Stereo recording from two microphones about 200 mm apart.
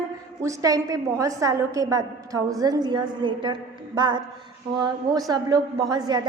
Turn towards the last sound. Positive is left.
turn(degrees=-20)  # may be behind; listen again after turning